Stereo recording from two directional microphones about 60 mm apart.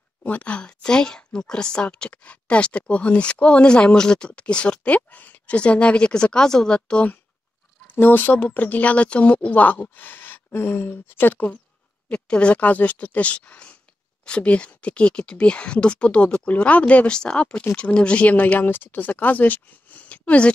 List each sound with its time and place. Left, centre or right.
0.2 s speech: left
7.8 s speech: left
12.1 s speech: centre